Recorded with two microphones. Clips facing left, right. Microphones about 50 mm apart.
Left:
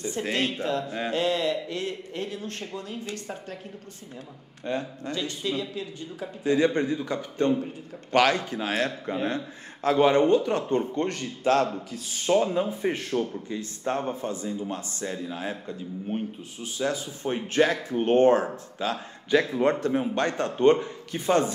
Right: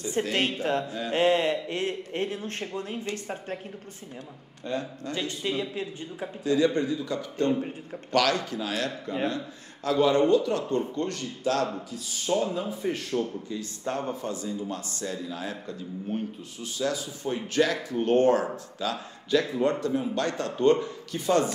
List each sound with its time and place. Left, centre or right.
0.2 s a man's voice: right
0.8 s a man's voice: left
1.1 s a man's voice: right
4.6 s speech: left
5.1 s speech: right
6.4 s a man's voice: left
13.1 s speech: centre
13.5 s speech: left